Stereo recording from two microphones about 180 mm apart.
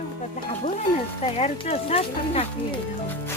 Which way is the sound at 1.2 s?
35° left (ahead or behind).